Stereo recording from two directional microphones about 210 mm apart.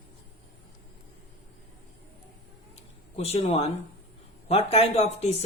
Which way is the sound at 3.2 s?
30° left (ahead or behind).